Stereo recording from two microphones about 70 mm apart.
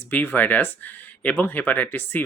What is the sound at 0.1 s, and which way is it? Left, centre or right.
Speech, left.